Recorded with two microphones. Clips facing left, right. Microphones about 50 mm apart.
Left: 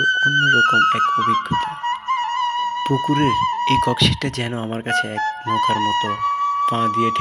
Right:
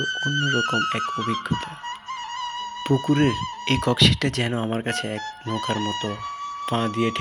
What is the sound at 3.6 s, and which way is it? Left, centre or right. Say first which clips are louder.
Speech: right 2 dB; centre.